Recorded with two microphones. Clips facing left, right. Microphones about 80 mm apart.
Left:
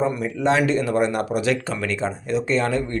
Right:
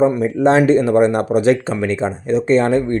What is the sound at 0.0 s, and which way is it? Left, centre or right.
Speech, right.